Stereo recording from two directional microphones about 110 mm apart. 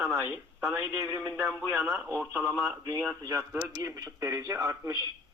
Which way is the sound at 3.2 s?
35° right (ahead or behind).